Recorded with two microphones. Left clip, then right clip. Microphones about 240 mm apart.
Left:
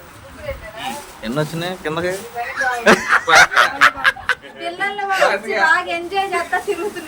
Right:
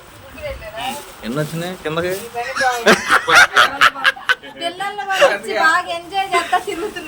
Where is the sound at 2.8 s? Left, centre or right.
Centre.